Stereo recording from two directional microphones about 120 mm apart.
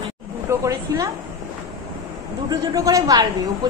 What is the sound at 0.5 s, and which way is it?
Speech, 25° right (ahead or behind).